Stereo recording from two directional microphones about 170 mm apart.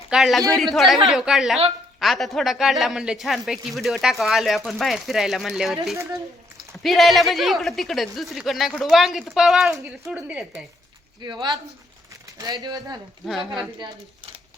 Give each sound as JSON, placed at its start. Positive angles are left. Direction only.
{"t": 0.1, "sound": "a man's voice", "side_deg": 0}
{"t": 11.2, "sound": "speech", "side_deg": -25}
{"t": 13.2, "sound": "a man's voice", "side_deg": 0}